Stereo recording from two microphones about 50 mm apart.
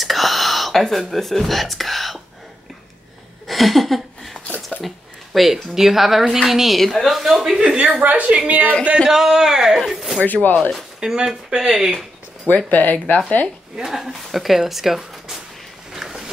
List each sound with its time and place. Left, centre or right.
0.0 s whispering: centre
3.4 s a sound: centre
4.8 s speech: centre
7.6 s a woman's voice: right
9.0 s speech: centre
10.2 s speech: left
11.0 s speech: centre
12.5 s speech: left
13.7 s speech: centre
15.9 s a sound: centre